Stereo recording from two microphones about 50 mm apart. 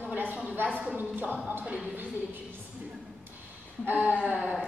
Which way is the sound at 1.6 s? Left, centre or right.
Right.